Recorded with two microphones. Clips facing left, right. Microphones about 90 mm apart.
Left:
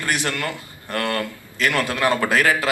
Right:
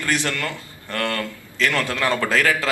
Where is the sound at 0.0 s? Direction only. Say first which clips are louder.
Even; 20° left (ahead or behind).